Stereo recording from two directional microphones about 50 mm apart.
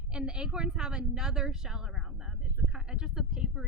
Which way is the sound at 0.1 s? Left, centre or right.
Centre.